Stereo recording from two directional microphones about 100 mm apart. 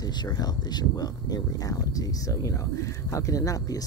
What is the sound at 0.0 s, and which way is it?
Speech, 45° left (ahead or behind).